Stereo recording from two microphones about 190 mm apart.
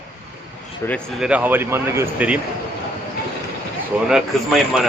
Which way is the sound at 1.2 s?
5° right (ahead or behind).